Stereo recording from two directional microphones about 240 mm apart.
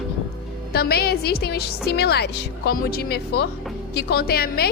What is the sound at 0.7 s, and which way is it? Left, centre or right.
A woman's voice, left.